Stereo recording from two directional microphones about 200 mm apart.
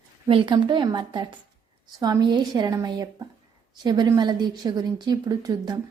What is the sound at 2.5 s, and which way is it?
A woman's voice, 20° right (ahead or behind).